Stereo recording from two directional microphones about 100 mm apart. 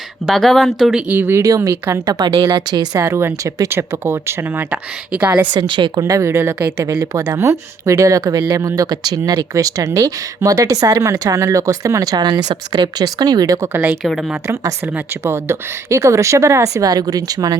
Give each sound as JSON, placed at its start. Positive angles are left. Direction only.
{"t": 0.3, "sound": "speech", "side_deg": 0}
{"t": 1.1, "sound": "speech", "side_deg": -20}
{"t": 1.4, "sound": "speech", "side_deg": -35}
{"t": 3.0, "sound": "speech", "side_deg": -25}
{"t": 5.5, "sound": "speech", "side_deg": -55}
{"t": 6.0, "sound": "speech", "side_deg": -30}
{"t": 14.0, "sound": "speech", "side_deg": 0}
{"t": 15.2, "sound": "speech", "side_deg": -25}